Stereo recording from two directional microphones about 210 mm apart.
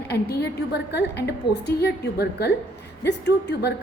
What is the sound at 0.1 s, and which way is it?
A woman's voice, 50° left (ahead or behind).